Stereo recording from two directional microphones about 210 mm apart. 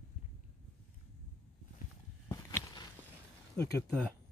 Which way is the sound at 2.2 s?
15° left (ahead or behind).